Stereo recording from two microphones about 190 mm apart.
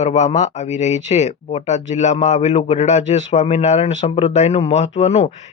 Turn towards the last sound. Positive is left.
turn(degrees=35)  # may be behind; listen again after turning